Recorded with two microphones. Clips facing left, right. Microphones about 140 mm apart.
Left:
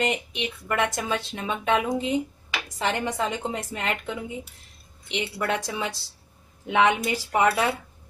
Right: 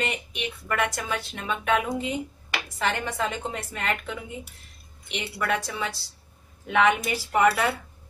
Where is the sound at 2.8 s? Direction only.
15° left (ahead or behind).